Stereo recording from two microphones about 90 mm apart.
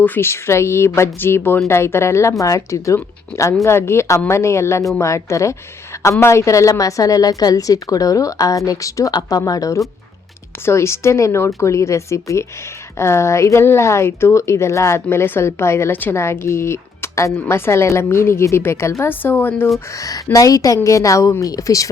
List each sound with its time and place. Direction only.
0.0 s a woman's voice: 25° left (ahead or behind)
20.0 s a woman's voice: 40° left (ahead or behind)